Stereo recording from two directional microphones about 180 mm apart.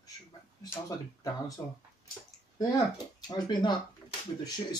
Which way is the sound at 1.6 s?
20° left (ahead or behind).